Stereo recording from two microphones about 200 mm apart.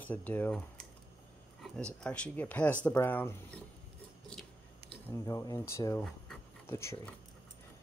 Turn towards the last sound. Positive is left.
turn(degrees=15)  # may be behind; listen again after turning